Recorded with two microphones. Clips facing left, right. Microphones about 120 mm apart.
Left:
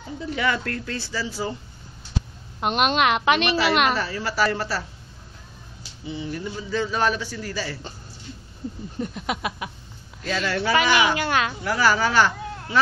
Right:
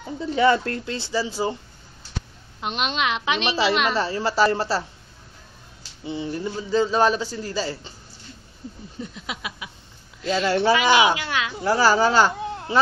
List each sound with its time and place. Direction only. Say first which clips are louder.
0.3 s a man's voice: right 6 dB; 30° right (ahead or behind)
2.6 s a woman's voice: left 5 dB; 50° left (ahead or behind)
3.9 s a man's voice: right 3 dB; 30° right (ahead or behind)
6.0 s a man's voice: right 3 dB; 25° right (ahead or behind)
8.9 s a sound: left 6 dB; 55° left (ahead or behind)
10.2 s a man's voice: right 5 dB; 30° right (ahead or behind)
11.1 s a woman's voice: left 4 dB; 45° left (ahead or behind)
11.6 s speech: right 6 dB; 30° right (ahead or behind)